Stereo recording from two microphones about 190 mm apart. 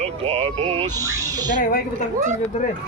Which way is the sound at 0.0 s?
30° right (ahead or behind).